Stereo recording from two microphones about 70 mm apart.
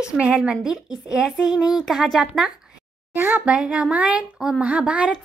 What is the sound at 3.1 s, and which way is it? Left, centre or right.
Speech, right.